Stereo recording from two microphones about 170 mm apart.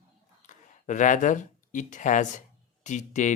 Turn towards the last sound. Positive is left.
turn(degrees=45)  # may be behind; listen again after turning